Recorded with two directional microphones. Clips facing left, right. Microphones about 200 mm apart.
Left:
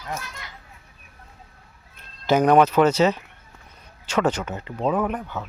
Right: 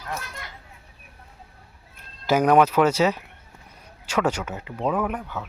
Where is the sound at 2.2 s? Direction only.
10° right (ahead or behind).